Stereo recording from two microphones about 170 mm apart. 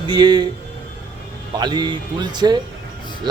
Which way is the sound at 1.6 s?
25° right (ahead or behind).